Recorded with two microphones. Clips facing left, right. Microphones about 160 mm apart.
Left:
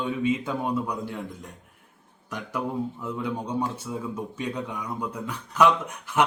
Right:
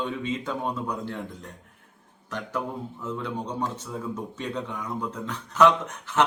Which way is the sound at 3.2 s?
10° left (ahead or behind).